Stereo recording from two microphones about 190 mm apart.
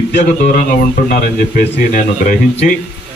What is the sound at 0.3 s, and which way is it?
Speech, 45° left (ahead or behind).